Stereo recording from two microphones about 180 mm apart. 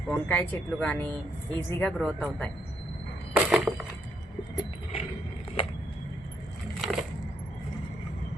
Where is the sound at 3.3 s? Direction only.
5° right (ahead or behind).